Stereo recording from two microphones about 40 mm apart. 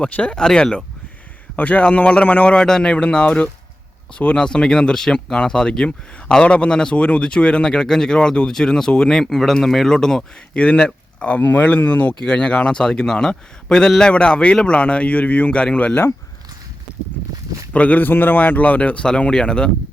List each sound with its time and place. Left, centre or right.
0.0 s speech: left
0.4 s speech: centre
1.5 s speech: left
2.6 s speech: centre
4.4 s speech: centre
6.9 s speech: left; by 10.2 s centre
10.5 s speech: left
11.3 s speech: left; by 13.9 s centre
14.0 s speech: left
17.7 s speech: left
18.0 s speech: left
19.3 s speech: left